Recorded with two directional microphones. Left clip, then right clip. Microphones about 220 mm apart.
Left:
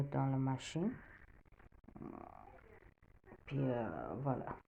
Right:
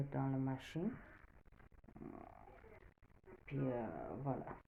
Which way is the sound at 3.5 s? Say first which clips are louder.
Left 3 dB; 40° left (ahead or behind).